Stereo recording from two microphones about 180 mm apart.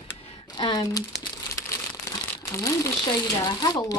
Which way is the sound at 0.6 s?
25° left (ahead or behind).